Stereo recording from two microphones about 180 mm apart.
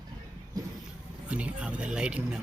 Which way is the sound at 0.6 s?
20° right (ahead or behind).